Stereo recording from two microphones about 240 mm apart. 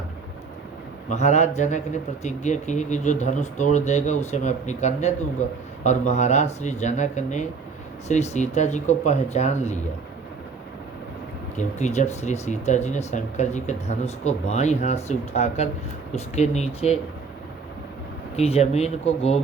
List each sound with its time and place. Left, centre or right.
1.1 s speech: left
11.5 s speech: left
18.3 s speech: left